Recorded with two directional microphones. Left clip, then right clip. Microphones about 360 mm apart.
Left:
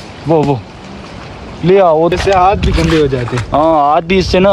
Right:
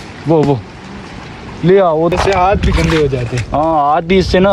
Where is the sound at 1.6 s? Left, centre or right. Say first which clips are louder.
Left 2 dB; left.